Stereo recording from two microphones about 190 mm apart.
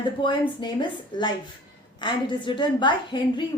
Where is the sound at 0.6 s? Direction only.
25° left (ahead or behind).